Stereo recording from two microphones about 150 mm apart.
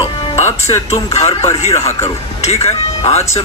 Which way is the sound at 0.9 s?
45° left (ahead or behind).